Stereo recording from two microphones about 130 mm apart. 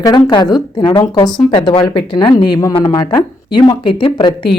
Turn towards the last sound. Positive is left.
turn(degrees=40)  # may be behind; listen again after turning